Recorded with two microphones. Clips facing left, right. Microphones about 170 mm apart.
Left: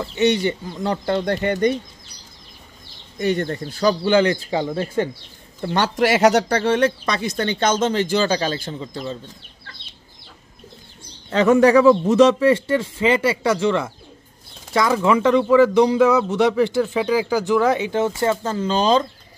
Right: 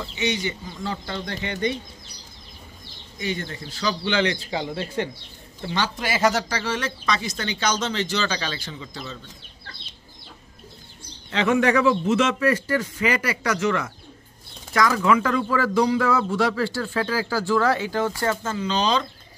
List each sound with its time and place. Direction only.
0.0 s speech: 55° left (ahead or behind)
3.2 s speech: 55° left (ahead or behind)
5.7 s speech: 70° left (ahead or behind); by 9.2 s 35° left (ahead or behind)
11.2 s speech: 40° left (ahead or behind); by 18.4 s 20° left (ahead or behind)
18.4 s speech: 40° left (ahead or behind)